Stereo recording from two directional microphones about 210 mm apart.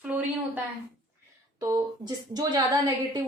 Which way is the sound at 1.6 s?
20° right (ahead or behind).